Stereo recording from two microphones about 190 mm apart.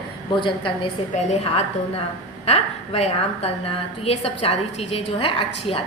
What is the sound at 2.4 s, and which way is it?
A woman's voice, 35° left (ahead or behind).